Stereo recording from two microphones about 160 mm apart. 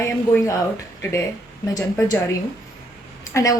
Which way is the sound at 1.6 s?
20° left (ahead or behind).